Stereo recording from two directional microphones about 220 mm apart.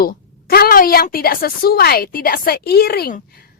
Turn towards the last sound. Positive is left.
turn(degrees=45)  # may be behind; listen again after turning